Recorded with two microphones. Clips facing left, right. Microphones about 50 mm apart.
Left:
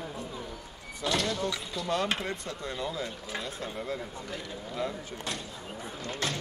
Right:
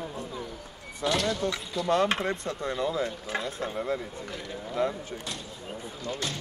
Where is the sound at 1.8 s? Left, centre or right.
Right.